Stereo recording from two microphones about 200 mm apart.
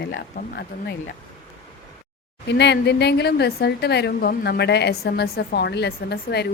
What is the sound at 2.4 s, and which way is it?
A woman's voice, 60° left (ahead or behind).